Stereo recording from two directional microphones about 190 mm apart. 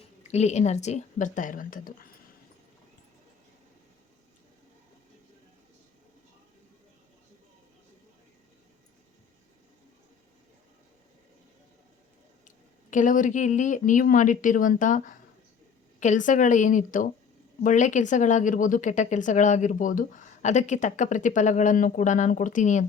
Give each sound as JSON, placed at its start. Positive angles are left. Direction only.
{"t": 0.2, "sound": "a woman's voice", "side_deg": 35}
{"t": 12.5, "sound": "a woman's voice", "side_deg": 40}